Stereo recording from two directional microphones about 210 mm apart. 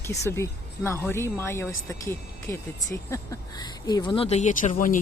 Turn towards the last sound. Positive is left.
turn(degrees=40)  # may be behind; listen again after turning